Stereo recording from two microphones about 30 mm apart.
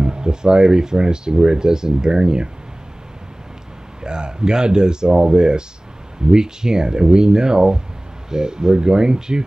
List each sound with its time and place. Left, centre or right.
0.0 s speech: right
4.0 s speech: right